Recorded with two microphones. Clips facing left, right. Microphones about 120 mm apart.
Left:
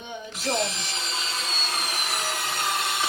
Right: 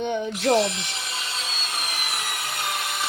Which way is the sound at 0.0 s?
70° right (ahead or behind).